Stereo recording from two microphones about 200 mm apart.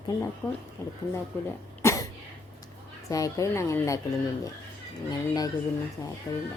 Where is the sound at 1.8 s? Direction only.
15° left (ahead or behind).